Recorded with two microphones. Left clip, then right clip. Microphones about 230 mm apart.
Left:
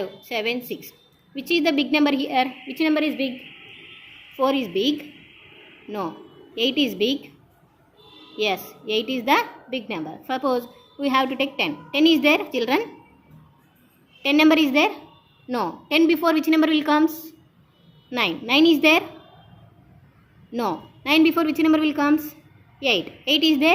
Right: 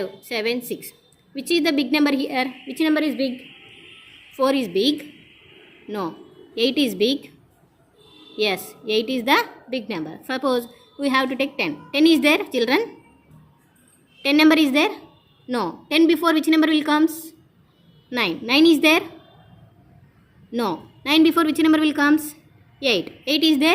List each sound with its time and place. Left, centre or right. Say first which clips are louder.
0.3 s a woman's voice: right 1 dB; right
4.4 s a woman's voice: right 2 dB; right
8.4 s a woman's voice: right 1 dB; right
14.2 s a woman's voice: right 1 dB; right
20.5 s a woman's voice: right 1 dB; right